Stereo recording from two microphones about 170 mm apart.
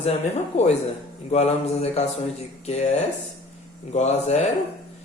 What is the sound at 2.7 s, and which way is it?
Speech, 40° left (ahead or behind).